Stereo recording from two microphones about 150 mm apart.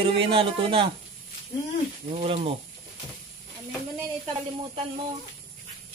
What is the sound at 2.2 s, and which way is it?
Speech, 40° right (ahead or behind).